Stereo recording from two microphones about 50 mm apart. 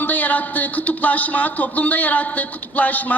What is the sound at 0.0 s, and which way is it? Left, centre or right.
A woman's voice, left.